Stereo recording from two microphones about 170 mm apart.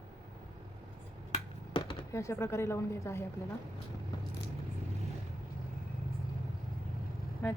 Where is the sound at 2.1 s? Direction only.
15° left (ahead or behind).